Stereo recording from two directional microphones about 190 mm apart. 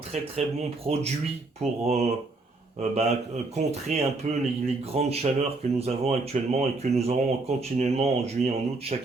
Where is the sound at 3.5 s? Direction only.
35° right (ahead or behind).